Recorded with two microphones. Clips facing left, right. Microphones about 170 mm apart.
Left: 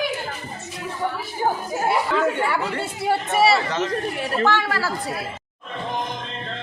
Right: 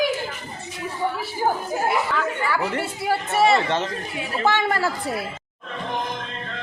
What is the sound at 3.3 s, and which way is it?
Speech, 10° left (ahead or behind).